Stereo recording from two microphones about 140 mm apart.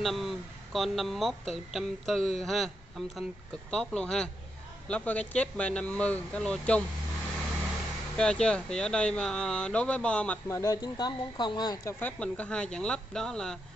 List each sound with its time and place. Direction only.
0.0 s speech: centre (ahead or behind)
3.7 s speech: 5° left (ahead or behind)
8.2 s speech: 5° left (ahead or behind)
10.5 s speech: 25° left (ahead or behind)
12.0 s speech: 10° left (ahead or behind)